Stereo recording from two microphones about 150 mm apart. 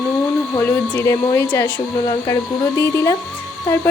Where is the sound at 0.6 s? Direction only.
15° left (ahead or behind).